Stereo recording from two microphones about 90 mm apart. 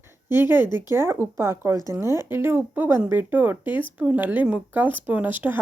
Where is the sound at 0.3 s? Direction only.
25° right (ahead or behind).